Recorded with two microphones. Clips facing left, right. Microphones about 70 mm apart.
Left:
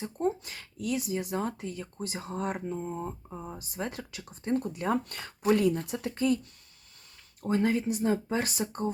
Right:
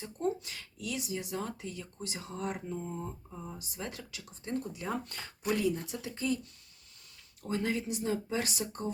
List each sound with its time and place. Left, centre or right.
0.0 s speech: left
6.1 s speech: left
7.4 s speech: left